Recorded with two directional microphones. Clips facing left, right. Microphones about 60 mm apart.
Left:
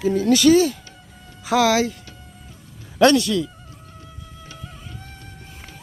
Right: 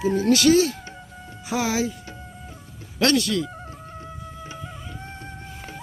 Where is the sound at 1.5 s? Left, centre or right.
Left.